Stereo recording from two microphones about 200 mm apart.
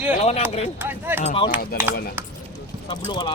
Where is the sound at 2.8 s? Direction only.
25° left (ahead or behind).